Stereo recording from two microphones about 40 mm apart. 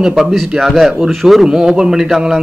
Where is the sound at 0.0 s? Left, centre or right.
Centre.